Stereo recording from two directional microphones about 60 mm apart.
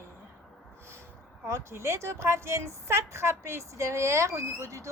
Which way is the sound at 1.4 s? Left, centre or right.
Right.